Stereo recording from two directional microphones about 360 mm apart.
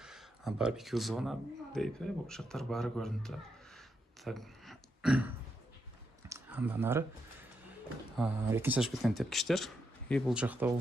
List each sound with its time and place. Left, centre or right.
0.0 s speech: centre
3.8 s a sound: centre
8.1 s speech: centre